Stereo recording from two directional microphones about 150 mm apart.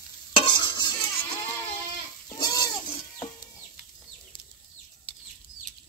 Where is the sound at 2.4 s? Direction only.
25° left (ahead or behind).